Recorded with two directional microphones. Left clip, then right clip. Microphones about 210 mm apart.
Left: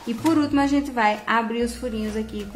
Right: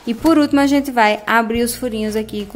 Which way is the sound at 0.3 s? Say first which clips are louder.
Right 7 dB; 40° right (ahead or behind).